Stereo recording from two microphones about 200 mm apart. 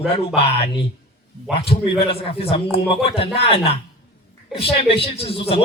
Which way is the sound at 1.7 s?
30° left (ahead or behind).